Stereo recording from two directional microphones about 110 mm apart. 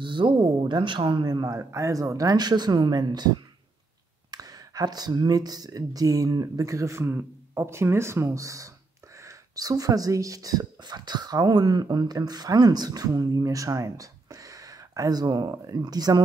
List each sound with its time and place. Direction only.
0.0 s speech: 45° right (ahead or behind)